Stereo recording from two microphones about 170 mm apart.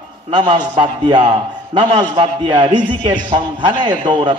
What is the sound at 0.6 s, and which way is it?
A man's voice, 25° right (ahead or behind).